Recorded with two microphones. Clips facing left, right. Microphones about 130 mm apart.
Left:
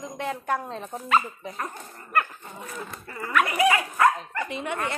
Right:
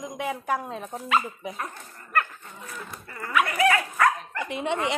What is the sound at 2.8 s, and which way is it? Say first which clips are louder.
Speech: left 2 dB; 10° left (ahead or behind).